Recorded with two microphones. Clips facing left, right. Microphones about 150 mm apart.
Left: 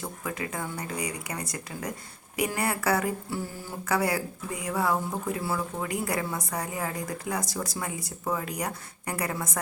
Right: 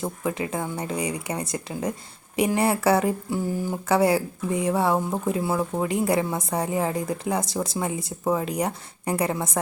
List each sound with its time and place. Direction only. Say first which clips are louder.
0.0 s a woman's voice: right 7 dB; 25° right (ahead or behind)